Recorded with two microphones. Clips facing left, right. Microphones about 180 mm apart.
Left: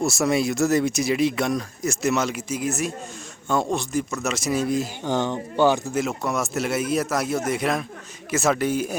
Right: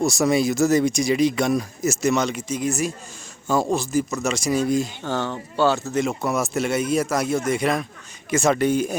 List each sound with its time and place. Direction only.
0.0 s speech: centre (ahead or behind)
5.0 s speech: 15° left (ahead or behind)
6.0 s speech: centre (ahead or behind)